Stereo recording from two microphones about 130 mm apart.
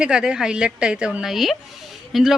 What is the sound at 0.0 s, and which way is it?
A woman's voice, 5° right (ahead or behind).